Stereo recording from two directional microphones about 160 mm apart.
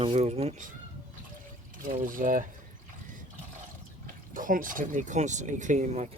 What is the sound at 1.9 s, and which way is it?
Speech, 55° right (ahead or behind).